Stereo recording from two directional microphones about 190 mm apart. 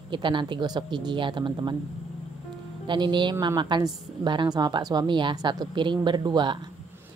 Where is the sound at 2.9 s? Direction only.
25° right (ahead or behind).